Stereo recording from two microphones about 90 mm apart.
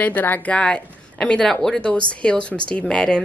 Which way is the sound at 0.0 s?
20° left (ahead or behind).